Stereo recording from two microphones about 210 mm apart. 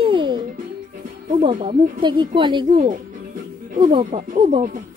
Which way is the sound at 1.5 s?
35° right (ahead or behind).